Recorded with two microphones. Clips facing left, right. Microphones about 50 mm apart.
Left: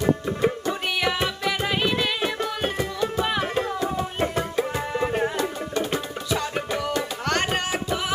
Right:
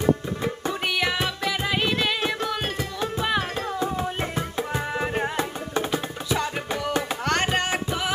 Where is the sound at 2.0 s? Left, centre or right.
Centre.